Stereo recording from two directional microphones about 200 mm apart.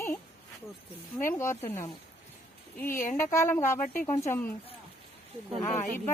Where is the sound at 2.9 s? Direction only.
40° left (ahead or behind).